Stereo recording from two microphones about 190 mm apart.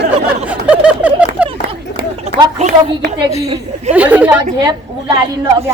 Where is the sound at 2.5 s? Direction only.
35° right (ahead or behind).